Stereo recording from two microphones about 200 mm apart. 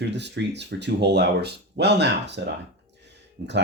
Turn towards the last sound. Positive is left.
turn(degrees=-60)  # may be behind; listen again after turning